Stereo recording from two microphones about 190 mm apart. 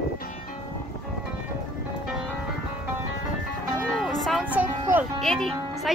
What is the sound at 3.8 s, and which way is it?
Music, centre (ahead or behind).